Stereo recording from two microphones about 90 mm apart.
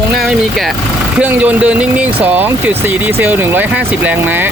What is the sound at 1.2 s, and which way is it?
Speech, 15° right (ahead or behind).